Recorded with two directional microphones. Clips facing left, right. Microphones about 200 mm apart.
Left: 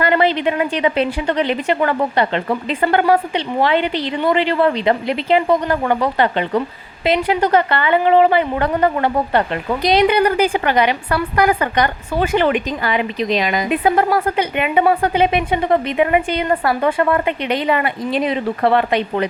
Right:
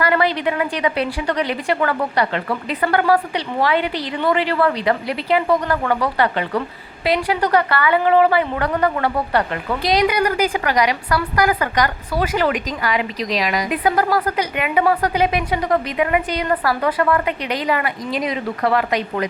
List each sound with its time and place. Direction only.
0.0 s a woman's voice: 25° left (ahead or behind)